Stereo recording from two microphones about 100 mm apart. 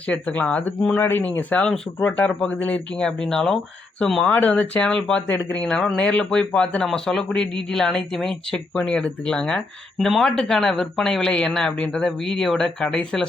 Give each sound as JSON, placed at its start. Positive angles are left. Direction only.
{"t": 0.1, "sound": "speech", "side_deg": 15}